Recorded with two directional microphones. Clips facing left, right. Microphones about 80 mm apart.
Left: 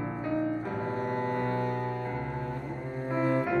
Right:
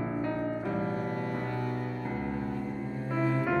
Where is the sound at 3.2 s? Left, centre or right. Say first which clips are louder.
Left 2 dB; left.